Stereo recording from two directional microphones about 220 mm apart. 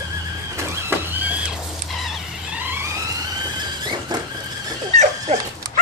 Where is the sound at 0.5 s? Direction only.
10° right (ahead or behind).